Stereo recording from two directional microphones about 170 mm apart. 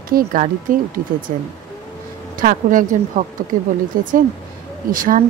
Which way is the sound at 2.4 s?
55° right (ahead or behind).